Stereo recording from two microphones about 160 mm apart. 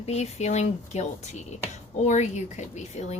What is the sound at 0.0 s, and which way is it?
A woman's voice, 45° left (ahead or behind).